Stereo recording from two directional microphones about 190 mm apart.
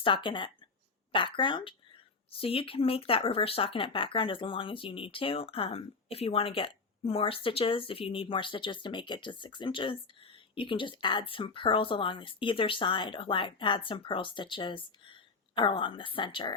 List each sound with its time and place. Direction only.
0.0 s speech: 25° left (ahead or behind)